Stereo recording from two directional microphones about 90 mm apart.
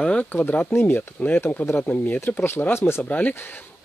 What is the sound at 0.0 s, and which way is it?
Speech, 15° left (ahead or behind).